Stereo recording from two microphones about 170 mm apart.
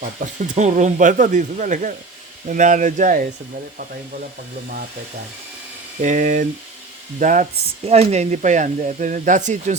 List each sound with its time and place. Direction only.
0.0 s speech: 45° right (ahead or behind)
6.0 s speech: 50° right (ahead or behind)
7.9 s speech: 40° right (ahead or behind)